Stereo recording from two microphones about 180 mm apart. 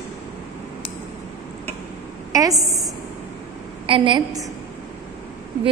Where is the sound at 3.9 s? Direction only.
25° right (ahead or behind).